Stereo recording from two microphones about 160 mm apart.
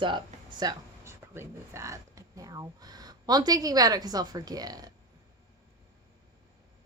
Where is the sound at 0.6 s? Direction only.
15° right (ahead or behind).